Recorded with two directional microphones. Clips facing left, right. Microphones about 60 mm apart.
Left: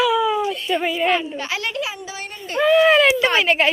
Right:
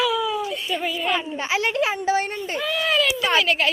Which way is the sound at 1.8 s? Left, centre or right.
Right.